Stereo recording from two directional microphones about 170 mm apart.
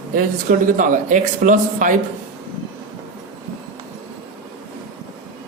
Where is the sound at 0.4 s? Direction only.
50° right (ahead or behind).